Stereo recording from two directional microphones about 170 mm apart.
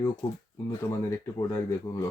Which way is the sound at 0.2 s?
15° left (ahead or behind).